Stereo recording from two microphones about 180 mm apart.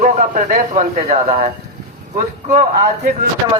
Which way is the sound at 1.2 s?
35° right (ahead or behind).